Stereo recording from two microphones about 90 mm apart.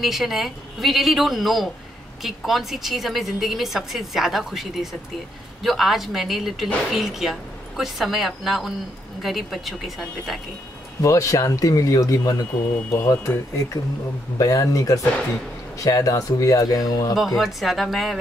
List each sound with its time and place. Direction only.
0.0 s speech: centre (ahead or behind)
11.0 s speech: 35° left (ahead or behind)
12.9 s speech: 30° left (ahead or behind)
14.4 s speech: 40° left (ahead or behind)
17.4 s speech: centre (ahead or behind)